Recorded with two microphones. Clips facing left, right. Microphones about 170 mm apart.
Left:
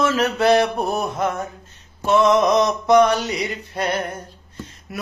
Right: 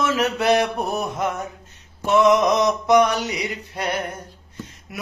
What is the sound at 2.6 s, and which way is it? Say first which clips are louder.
Music: left 2 dB; 15° right (ahead or behind).